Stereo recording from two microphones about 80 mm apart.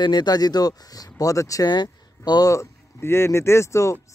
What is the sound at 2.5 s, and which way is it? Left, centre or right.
Speech, left.